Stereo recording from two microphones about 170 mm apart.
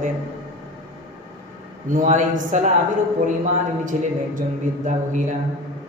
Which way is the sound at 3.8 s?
50° right (ahead or behind).